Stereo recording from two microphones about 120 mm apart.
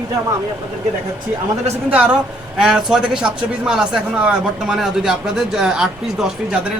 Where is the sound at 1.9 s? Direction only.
10° right (ahead or behind).